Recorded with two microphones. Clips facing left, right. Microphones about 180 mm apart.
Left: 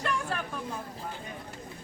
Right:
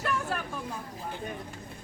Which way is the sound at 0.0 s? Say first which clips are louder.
Right 1 dB; 5° right (ahead or behind).